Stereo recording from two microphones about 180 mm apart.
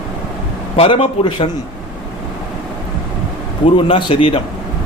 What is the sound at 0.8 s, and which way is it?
Speech, 30° left (ahead or behind).